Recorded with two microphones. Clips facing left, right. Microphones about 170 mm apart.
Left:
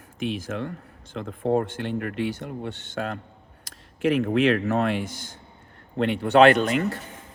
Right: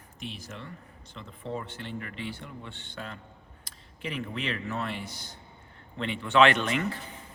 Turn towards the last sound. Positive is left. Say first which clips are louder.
# left 8 dB
turn(degrees=40)  # may be behind; listen again after turning